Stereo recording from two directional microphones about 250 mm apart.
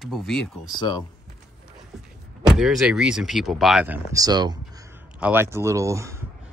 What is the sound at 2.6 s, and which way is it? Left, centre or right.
Speech, centre.